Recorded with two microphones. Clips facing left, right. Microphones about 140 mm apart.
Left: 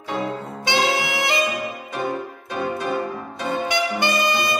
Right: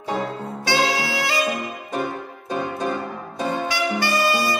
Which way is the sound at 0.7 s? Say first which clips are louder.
Even; 20° left (ahead or behind).